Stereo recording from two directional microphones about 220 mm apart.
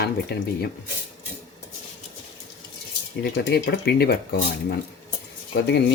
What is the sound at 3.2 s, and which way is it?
Speech, 50° left (ahead or behind).